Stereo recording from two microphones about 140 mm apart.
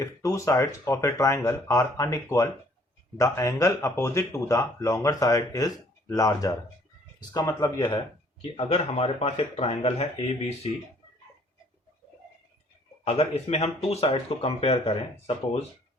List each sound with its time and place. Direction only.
0.0 s speech: 20° left (ahead or behind); by 10.7 s 50° left (ahead or behind)
13.1 s speech: 50° left (ahead or behind)